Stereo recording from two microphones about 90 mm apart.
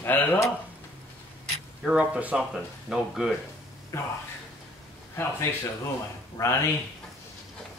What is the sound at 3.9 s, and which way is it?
Speech, 35° left (ahead or behind).